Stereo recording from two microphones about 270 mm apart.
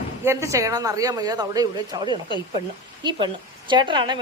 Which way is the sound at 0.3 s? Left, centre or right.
Centre.